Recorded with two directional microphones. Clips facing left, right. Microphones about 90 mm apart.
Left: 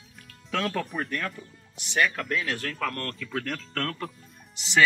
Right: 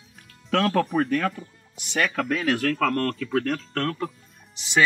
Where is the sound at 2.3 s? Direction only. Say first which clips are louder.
Right 7 dB; 85° right; by 3.2 s 65° right (ahead or behind).